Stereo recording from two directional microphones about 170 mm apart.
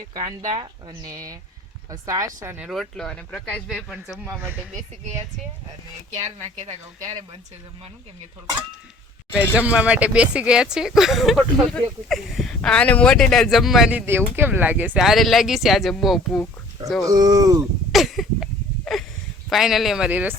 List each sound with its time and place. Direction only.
0.1 s speech: 25° right (ahead or behind)
2.6 s speech: centre (ahead or behind)
9.6 s speech: 10° right (ahead or behind)
14.0 s speech: 15° right (ahead or behind)
17.1 s speech: 20° right (ahead or behind)
17.9 s a sound: centre (ahead or behind)
19.5 s speech: centre (ahead or behind)